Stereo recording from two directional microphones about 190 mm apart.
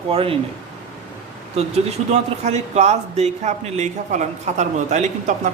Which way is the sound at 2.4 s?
35° right (ahead or behind).